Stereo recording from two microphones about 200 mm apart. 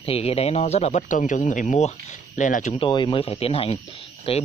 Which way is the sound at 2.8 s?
25° left (ahead or behind).